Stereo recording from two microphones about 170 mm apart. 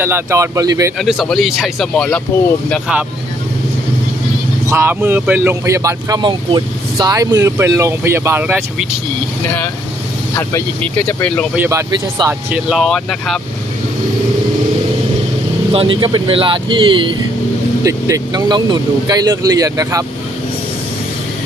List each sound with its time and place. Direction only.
0.0 s speech: 15° right (ahead or behind)
0.9 s speech: centre (ahead or behind)
4.7 s speech: 15° right (ahead or behind)
11.2 s speech: 5° left (ahead or behind)
11.5 s speech: 15° right (ahead or behind); by 13.4 s centre (ahead or behind)
15.7 s speech: 30° right (ahead or behind)